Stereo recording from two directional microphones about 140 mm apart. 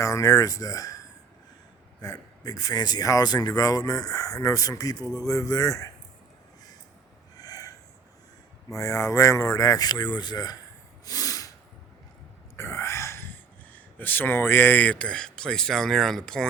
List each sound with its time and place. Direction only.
0.0 s speech: 25° left (ahead or behind)
7.3 s snort: 25° left (ahead or behind)
8.7 s speech: 20° left (ahead or behind)
11.0 s snort: 25° left (ahead or behind)
12.5 s a sound: 20° left (ahead or behind)
14.0 s speech: 15° left (ahead or behind)